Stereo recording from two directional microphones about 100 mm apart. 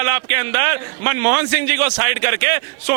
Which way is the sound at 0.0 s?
25° right (ahead or behind).